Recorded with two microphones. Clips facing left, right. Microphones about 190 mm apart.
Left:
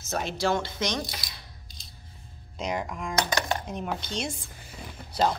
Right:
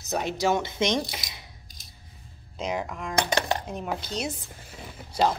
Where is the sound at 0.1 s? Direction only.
15° right (ahead or behind).